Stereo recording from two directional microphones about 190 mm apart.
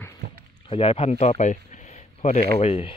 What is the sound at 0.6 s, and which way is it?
Speech, 30° left (ahead or behind).